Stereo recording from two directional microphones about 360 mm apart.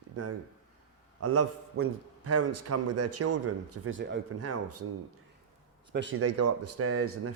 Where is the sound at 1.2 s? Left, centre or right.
Right.